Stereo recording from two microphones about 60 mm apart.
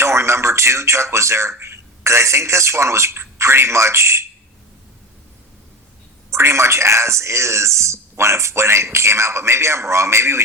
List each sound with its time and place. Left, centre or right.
0.0 s speech: right
6.3 s speech: right